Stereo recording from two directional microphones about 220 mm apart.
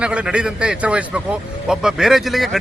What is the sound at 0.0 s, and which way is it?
A man's voice, 5° right (ahead or behind).